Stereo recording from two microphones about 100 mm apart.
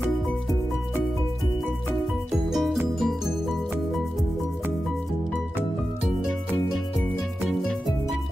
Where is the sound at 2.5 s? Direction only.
Centre (ahead or behind).